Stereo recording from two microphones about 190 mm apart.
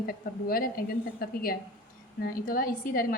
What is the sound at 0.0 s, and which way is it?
A woman's voice, 50° left (ahead or behind).